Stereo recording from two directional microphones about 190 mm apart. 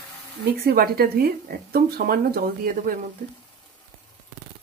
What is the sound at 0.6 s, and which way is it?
Speech, 50° right (ahead or behind).